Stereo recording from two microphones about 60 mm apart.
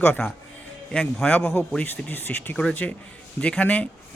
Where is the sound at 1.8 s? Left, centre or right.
Left.